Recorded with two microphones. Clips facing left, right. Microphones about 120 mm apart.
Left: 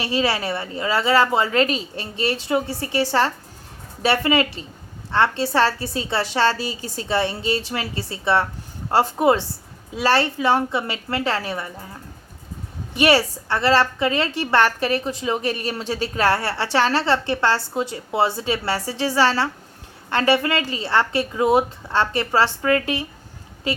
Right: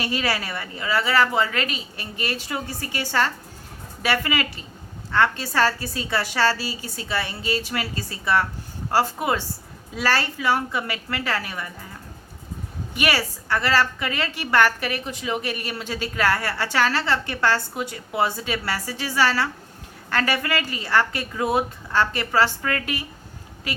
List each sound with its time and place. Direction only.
0.0 s a woman's voice: 25° left (ahead or behind)
12.9 s a woman's voice: 30° left (ahead or behind)